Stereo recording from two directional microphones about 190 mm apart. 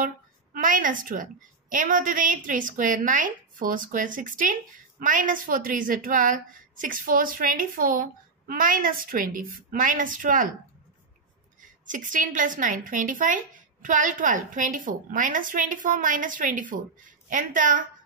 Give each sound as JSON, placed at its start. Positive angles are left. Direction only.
{"t": 0.0, "sound": "a woman's voice", "side_deg": -45}
{"t": 11.6, "sound": "a woman's voice", "side_deg": -45}